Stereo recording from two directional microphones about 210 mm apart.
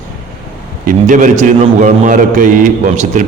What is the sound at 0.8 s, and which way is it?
A man's voice, 35° right (ahead or behind).